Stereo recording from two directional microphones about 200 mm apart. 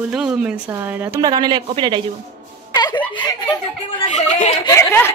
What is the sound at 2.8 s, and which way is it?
Giggle, 20° left (ahead or behind).